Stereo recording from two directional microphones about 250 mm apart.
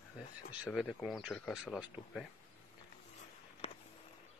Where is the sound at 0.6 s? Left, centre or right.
Centre.